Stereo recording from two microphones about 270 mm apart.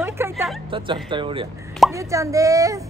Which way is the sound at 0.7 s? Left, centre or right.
Centre.